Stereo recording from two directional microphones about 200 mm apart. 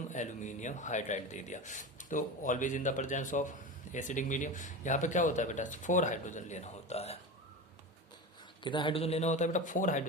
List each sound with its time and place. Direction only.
0.1 s speech: 35° left (ahead or behind)
8.6 s speech: 25° left (ahead or behind); by 10.0 s 40° left (ahead or behind)